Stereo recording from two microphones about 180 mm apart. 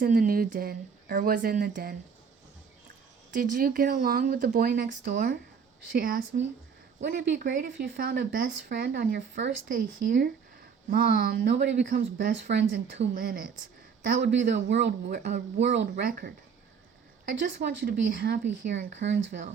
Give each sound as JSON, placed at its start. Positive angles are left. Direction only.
{"t": 0.0, "sound": "speech", "side_deg": -50}
{"t": 3.3, "sound": "speech", "side_deg": -50}
{"t": 7.3, "sound": "speech", "side_deg": -50}
{"t": 14.0, "sound": "speech", "side_deg": -65}
{"t": 19.1, "sound": "speech", "side_deg": -75}